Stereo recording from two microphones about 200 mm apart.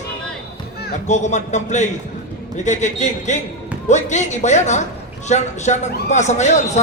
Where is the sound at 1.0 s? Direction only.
35° left (ahead or behind).